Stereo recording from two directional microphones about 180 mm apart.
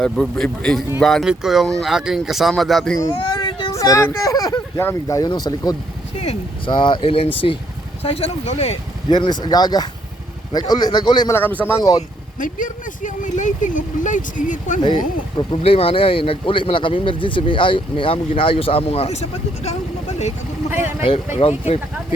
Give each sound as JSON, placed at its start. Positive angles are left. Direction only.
{"t": 0.0, "sound": "speech", "side_deg": 5}
{"t": 2.9, "sound": "speech", "side_deg": 15}
{"t": 9.1, "sound": "speech", "side_deg": 25}
{"t": 11.3, "sound": "speech", "side_deg": 10}
{"t": 11.8, "sound": "speech", "side_deg": 20}
{"t": 12.4, "sound": "speech", "side_deg": 45}
{"t": 14.8, "sound": "speech", "side_deg": 25}
{"t": 20.8, "sound": "speech", "side_deg": 30}